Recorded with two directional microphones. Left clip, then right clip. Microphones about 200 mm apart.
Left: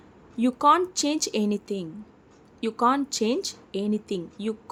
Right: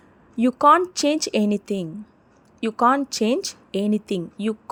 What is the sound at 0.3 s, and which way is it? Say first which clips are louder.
Speech: right 4 dB; 25° right (ahead or behind).